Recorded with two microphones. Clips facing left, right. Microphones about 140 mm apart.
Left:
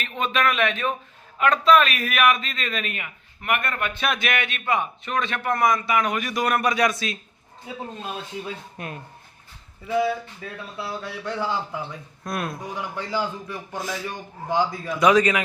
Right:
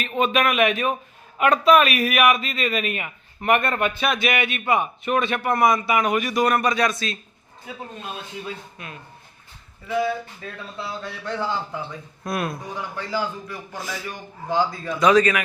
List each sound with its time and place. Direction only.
0.0 s a man's voice: 20° right (ahead or behind)
3.0 s a man's voice: 30° right (ahead or behind)
3.9 s a man's voice: centre (ahead or behind)
8.4 s a man's voice: 25° left (ahead or behind)
8.8 s speech: 50° left (ahead or behind)
10.4 s a man's voice: 5° left (ahead or behind)
12.2 s speech: 5° right (ahead or behind)
12.7 s a man's voice: 20° left (ahead or behind)